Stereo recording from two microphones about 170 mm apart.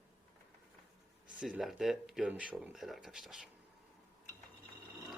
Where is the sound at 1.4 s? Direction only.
5° right (ahead or behind).